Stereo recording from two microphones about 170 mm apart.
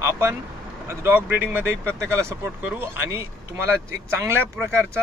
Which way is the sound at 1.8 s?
10° left (ahead or behind).